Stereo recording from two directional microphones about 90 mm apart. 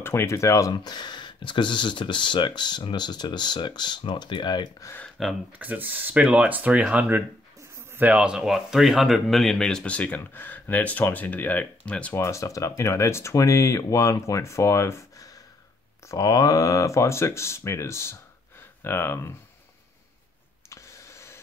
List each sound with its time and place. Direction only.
0.0 s speech: 30° left (ahead or behind)
0.7 s speech: 55° left (ahead or behind)
5.2 s speech: centre (ahead or behind)
5.6 s speech: 20° right (ahead or behind); by 12.1 s 15° left (ahead or behind)
12.1 s speech: 30° left (ahead or behind)
16.1 s speech: 45° left (ahead or behind); by 19.3 s 30° left (ahead or behind)
20.7 s a sound: 35° left (ahead or behind)